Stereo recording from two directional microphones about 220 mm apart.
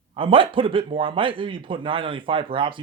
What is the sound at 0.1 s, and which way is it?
Speech, 25° right (ahead or behind).